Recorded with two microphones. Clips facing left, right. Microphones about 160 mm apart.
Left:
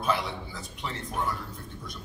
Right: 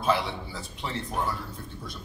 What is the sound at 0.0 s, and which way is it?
A man's voice, 30° right (ahead or behind).